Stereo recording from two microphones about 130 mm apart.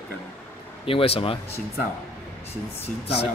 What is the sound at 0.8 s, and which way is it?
Speech, 45° left (ahead or behind).